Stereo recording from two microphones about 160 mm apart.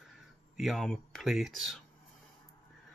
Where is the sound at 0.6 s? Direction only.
Centre (ahead or behind).